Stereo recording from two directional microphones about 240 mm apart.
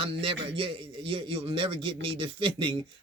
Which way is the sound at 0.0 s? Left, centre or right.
Right.